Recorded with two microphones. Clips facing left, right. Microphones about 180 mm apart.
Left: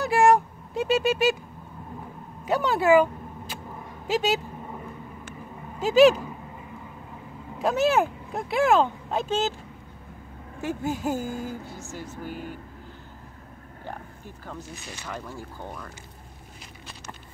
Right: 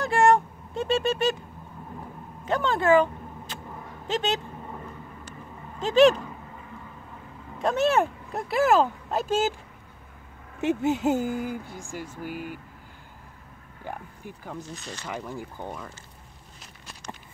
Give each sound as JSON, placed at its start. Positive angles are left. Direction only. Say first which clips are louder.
{"t": 0.0, "sound": "a sound", "louder": "left 1 dB", "side_deg": 5}
{"t": 2.4, "sound": "speech", "louder": "left 1 dB", "side_deg": 10}
{"t": 5.8, "sound": "speech", "louder": "left 1 dB", "side_deg": 5}
{"t": 7.5, "sound": "speech", "louder": "left 1 dB", "side_deg": 0}
{"t": 10.6, "sound": "speech", "louder": "right 5 dB", "side_deg": -20}
{"t": 13.8, "sound": "speech", "louder": "right 2 dB", "side_deg": -15}
{"t": 14.7, "sound": "speech", "louder": "right 2 dB", "side_deg": 10}
{"t": 15.0, "sound": "speech", "louder": "right 2 dB", "side_deg": -15}